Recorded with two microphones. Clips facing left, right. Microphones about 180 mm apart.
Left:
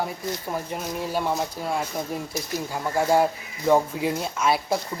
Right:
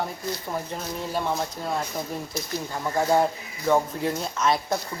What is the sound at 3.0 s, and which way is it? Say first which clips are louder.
Speech: left 1 dB; 5° left (ahead or behind).